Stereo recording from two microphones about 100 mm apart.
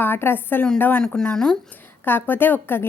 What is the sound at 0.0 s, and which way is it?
A woman's voice, 20° left (ahead or behind).